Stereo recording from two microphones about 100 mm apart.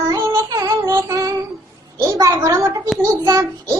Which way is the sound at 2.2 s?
35° right (ahead or behind).